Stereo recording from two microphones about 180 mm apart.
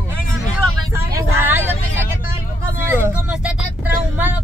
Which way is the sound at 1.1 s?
10° right (ahead or behind).